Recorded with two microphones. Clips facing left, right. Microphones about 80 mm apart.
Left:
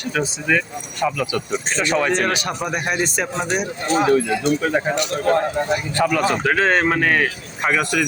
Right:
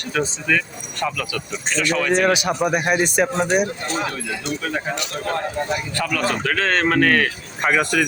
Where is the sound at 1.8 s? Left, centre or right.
Left.